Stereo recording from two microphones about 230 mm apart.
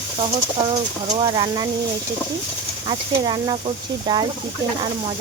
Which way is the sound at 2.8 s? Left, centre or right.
Centre.